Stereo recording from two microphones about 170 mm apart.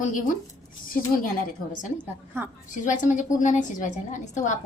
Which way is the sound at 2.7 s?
50° left (ahead or behind).